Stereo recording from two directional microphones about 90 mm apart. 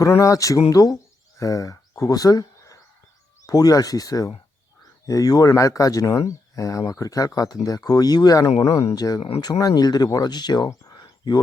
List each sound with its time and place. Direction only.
0.0 s speech: 35° left (ahead or behind)